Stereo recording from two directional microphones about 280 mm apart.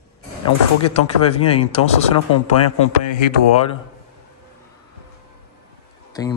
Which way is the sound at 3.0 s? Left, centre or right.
Left.